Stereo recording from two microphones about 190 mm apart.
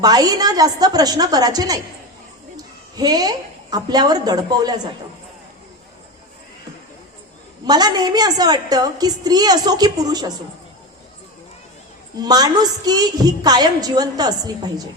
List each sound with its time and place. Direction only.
0.0 s a woman's voice: 20° right (ahead or behind)
2.9 s a woman's voice: 20° right (ahead or behind)
7.6 s a woman's voice: 20° right (ahead or behind)
12.2 s a woman's voice: 20° right (ahead or behind)